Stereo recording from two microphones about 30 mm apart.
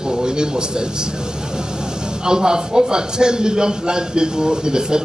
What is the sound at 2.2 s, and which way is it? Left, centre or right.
A man's voice, right.